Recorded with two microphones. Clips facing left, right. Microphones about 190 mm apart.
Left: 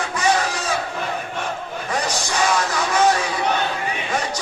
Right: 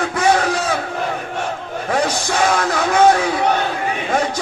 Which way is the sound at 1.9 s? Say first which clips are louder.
Right 6 dB; 55° right (ahead or behind).